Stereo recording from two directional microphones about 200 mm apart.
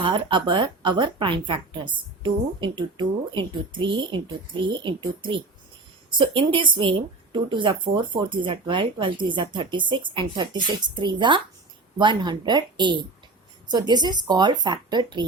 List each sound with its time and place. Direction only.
0.0 s speech: 25° right (ahead or behind)
6.1 s speech: 25° right (ahead or behind)